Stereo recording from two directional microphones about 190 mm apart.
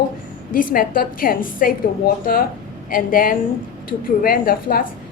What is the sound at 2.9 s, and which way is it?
A woman's voice, 45° left (ahead or behind).